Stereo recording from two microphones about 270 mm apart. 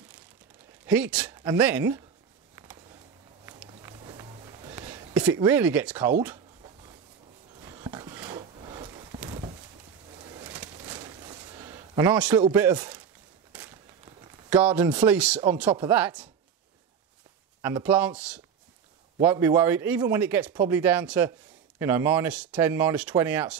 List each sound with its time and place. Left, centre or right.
0.8 s speech: centre
3.4 s a sound: centre
7.6 s a sound: centre
12.4 s speech: centre
14.5 s speech: centre
17.6 s speech: centre